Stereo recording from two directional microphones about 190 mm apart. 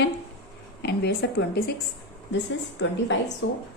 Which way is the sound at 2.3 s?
70° left (ahead or behind).